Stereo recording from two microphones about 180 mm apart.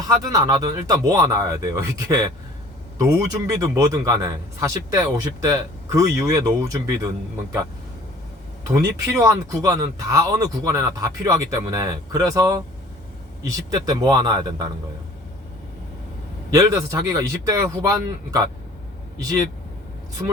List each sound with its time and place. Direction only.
0.1 s a man's voice: 20° right (ahead or behind)
8.7 s speech: 20° right (ahead or behind)
13.7 s speech: 20° right (ahead or behind)
16.5 s speech: 20° right (ahead or behind)
20.2 s a man's voice: 15° right (ahead or behind)